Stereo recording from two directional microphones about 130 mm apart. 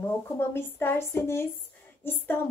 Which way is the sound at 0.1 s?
20° left (ahead or behind).